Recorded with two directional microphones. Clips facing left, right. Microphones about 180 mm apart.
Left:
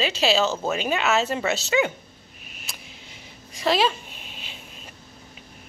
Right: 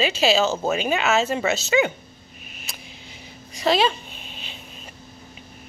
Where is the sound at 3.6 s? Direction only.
Centre (ahead or behind).